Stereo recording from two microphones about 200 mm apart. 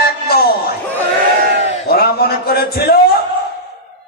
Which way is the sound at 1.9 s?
50° left (ahead or behind).